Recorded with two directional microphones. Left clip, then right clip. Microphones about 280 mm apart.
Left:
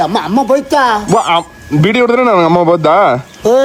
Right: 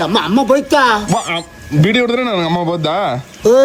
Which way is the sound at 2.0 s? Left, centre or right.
Left.